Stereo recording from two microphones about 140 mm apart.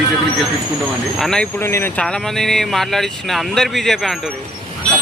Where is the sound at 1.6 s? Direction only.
20° left (ahead or behind).